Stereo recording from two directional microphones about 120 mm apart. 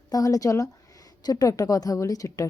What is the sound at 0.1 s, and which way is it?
A woman's voice, 30° left (ahead or behind).